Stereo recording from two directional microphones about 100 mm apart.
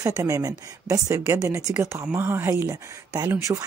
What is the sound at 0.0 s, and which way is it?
Speech, 30° right (ahead or behind).